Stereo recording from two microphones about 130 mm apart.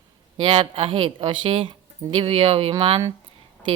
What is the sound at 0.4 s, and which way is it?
Speech, 40° right (ahead or behind).